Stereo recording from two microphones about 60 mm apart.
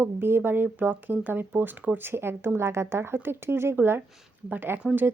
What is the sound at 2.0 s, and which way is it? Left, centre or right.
Speech, right.